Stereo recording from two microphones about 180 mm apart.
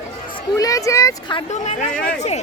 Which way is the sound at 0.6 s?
20° left (ahead or behind).